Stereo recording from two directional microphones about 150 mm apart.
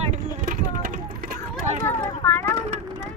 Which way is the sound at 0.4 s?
65° right (ahead or behind).